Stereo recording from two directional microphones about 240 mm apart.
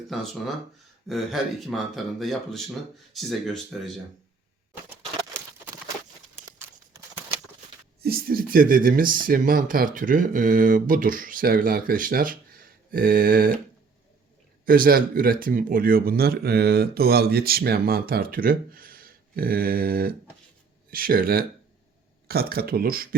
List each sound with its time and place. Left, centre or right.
0.1 s speech: centre
8.0 s speech: right
14.6 s speech: right